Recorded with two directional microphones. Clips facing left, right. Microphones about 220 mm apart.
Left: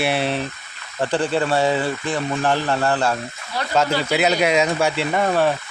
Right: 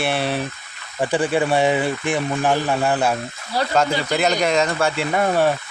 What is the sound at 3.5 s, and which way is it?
Speech, 35° right (ahead or behind).